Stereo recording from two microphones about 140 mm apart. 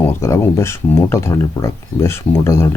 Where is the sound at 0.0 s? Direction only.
20° left (ahead or behind).